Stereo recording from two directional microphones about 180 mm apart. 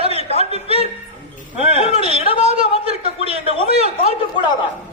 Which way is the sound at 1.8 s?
35° right (ahead or behind).